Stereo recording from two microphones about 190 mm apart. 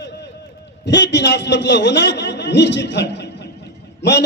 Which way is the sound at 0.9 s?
65° left (ahead or behind).